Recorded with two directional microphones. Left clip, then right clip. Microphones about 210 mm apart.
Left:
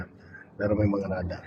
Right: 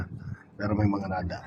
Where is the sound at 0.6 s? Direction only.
45° right (ahead or behind).